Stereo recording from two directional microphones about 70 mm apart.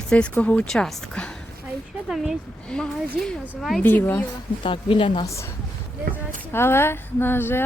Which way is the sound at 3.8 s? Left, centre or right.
Left.